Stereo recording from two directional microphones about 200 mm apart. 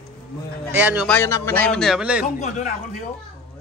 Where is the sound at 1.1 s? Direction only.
10° left (ahead or behind); by 2.3 s 5° right (ahead or behind).